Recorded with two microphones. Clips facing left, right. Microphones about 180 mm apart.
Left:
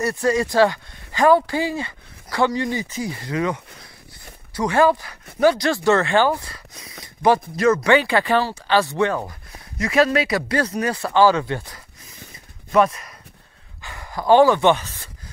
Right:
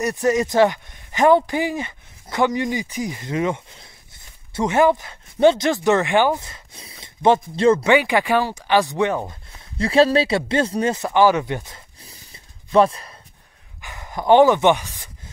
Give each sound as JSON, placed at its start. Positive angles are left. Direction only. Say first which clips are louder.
{"t": 0.0, "sound": "speech", "louder": "right 1 dB", "side_deg": -20}
{"t": 7.9, "sound": "speech", "louder": "even", "side_deg": -15}
{"t": 9.8, "sound": "speech", "louder": "right 3 dB", "side_deg": -30}
{"t": 13.7, "sound": "speech", "louder": "even", "side_deg": -20}